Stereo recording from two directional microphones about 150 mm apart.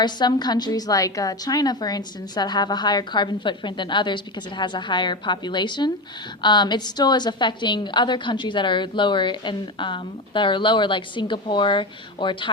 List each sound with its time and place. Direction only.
0.0 s a woman's voice: 30° left (ahead or behind)